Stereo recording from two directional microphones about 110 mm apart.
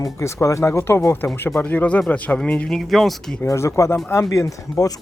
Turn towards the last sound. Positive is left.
turn(degrees=30)  # may be behind; listen again after turning